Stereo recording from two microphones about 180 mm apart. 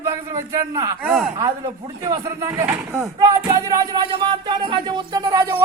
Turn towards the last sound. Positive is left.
turn(degrees=-20)  # may be behind; listen again after turning